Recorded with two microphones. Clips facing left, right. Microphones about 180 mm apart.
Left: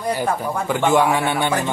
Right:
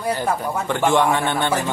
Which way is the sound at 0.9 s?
10° left (ahead or behind).